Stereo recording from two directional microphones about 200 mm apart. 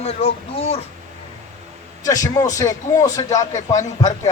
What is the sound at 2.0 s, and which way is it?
A man's voice, 15° left (ahead or behind).